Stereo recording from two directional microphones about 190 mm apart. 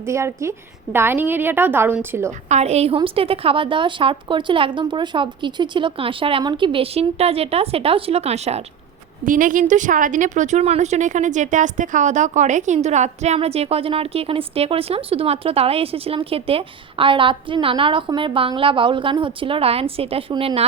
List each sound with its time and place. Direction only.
0.0 s a woman's voice: 15° right (ahead or behind)
2.5 s a woman's voice: 35° right (ahead or behind)
9.2 s a woman's voice: 45° right (ahead or behind); by 20.7 s 25° right (ahead or behind)